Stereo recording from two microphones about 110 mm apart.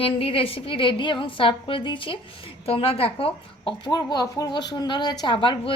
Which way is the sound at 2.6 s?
60° left (ahead or behind).